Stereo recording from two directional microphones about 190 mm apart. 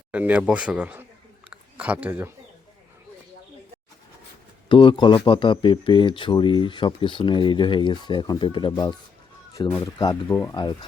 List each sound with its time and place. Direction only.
0.1 s speech: 10° right (ahead or behind)
1.5 s a sound: 5° right (ahead or behind)
4.7 s speech: 25° left (ahead or behind)